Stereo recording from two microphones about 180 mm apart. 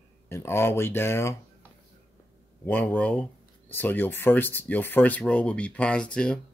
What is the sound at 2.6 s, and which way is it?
Speech, 10° left (ahead or behind).